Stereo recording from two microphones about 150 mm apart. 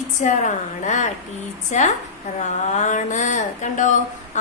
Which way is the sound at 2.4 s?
50° left (ahead or behind).